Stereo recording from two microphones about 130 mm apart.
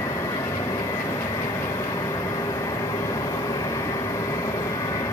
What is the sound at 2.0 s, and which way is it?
Vehicle, 25° left (ahead or behind).